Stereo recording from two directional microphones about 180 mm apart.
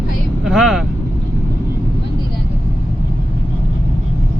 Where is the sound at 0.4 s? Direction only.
Centre (ahead or behind).